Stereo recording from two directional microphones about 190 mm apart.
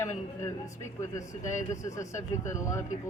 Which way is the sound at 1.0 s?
15° left (ahead or behind).